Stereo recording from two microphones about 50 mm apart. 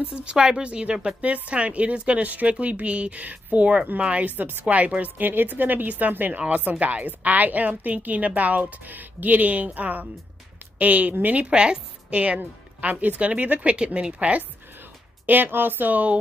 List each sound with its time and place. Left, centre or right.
0.1 s a woman's voice: centre; by 4.7 s right
4.7 s a woman's voice: right
15.2 s a woman's voice: right